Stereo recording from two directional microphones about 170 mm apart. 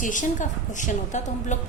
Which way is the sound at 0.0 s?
50° left (ahead or behind).